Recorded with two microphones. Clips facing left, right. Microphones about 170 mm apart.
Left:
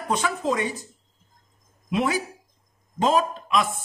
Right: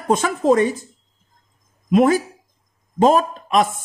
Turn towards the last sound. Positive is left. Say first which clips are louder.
# right 6 dB
turn(degrees=-45)  # may be behind; listen again after turning